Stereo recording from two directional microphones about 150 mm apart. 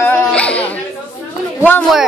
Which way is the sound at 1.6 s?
10° left (ahead or behind).